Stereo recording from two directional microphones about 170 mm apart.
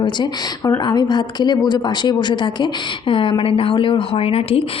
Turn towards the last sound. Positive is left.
turn(degrees=35)  # may be behind; listen again after turning